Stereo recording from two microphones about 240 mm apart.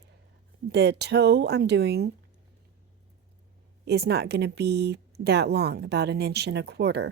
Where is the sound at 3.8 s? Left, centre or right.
Right.